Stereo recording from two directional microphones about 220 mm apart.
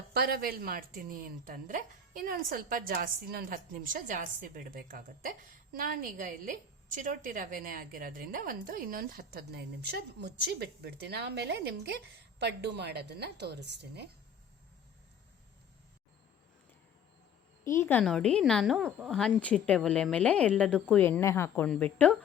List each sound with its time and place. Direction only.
0.1 s a woman's voice: 45° right (ahead or behind)
17.6 s a woman's voice: 10° left (ahead or behind)